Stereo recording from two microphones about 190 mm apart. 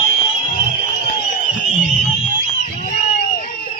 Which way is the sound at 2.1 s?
45° left (ahead or behind).